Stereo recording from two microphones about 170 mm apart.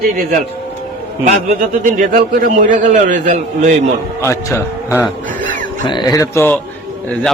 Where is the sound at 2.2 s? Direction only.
65° right (ahead or behind); by 3.9 s 45° right (ahead or behind).